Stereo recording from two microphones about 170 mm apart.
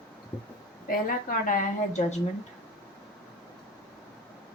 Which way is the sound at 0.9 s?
55° left (ahead or behind).